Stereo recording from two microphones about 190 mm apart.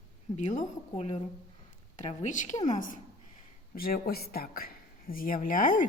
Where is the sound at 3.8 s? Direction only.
50° left (ahead or behind).